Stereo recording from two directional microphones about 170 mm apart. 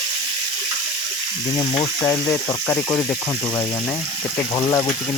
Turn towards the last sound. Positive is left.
turn(degrees=15)  # may be behind; listen again after turning